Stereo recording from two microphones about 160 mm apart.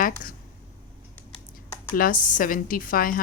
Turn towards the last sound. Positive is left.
turn(degrees=60)  # may be behind; listen again after turning